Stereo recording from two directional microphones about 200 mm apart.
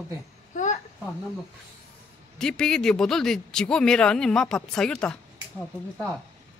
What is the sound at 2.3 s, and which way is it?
Speech, 5° left (ahead or behind).